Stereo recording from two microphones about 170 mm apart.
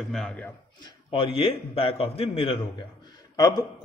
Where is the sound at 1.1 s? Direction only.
30° left (ahead or behind).